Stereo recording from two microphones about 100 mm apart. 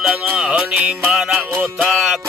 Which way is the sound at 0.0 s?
10° right (ahead or behind).